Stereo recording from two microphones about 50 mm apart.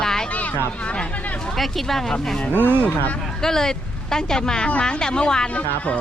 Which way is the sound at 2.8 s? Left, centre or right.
Left.